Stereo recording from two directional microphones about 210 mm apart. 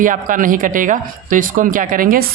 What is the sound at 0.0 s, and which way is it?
Speech, 40° right (ahead or behind).